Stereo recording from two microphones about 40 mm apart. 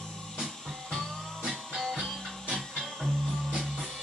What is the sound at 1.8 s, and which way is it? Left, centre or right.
Music, centre.